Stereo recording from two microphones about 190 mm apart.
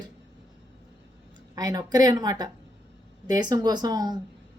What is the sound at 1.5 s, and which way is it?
A woman's voice, 20° right (ahead or behind).